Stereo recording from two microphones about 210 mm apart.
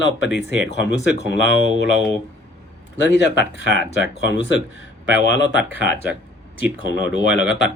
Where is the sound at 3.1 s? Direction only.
55° left (ahead or behind).